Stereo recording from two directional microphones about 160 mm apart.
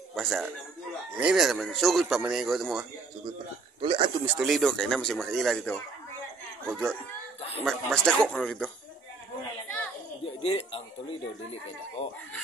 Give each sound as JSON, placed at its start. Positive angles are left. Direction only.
{"t": 0.1, "sound": "speech", "side_deg": 0}
{"t": 3.8, "sound": "speech", "side_deg": -35}
{"t": 4.3, "sound": "speech", "side_deg": -5}
{"t": 10.2, "sound": "speech", "side_deg": 35}